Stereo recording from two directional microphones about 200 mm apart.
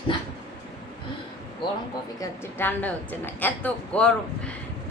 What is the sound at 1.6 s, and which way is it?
Speech, 25° left (ahead or behind).